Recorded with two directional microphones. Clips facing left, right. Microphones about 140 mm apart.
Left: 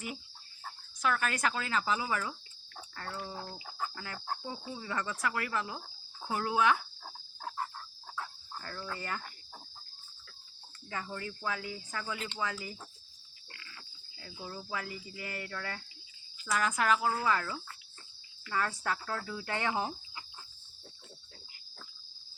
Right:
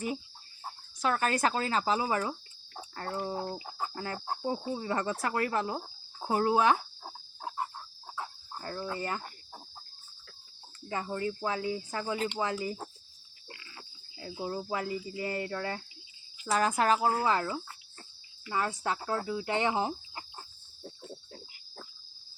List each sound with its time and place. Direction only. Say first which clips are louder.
0.6 s speech: right 2 dB; 30° right (ahead or behind)
3.3 s cricket: right 7 dB; 30° right (ahead or behind)
4.4 s speech: right 8 dB; 35° right (ahead or behind)
7.0 s cricket: right 2 dB; 20° right (ahead or behind)
10.8 s cricket: right 7 dB; 30° right (ahead or behind)
13.5 s speech: right 4 dB; 25° right (ahead or behind)
16.4 s cricket: right 4 dB; 30° right (ahead or behind)